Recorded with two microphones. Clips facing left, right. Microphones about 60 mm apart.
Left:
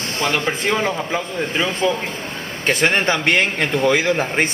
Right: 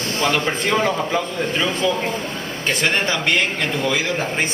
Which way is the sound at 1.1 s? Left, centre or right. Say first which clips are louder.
Right 1 dB; centre.